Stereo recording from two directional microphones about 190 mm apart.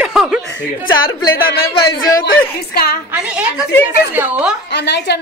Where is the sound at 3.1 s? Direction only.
5° right (ahead or behind).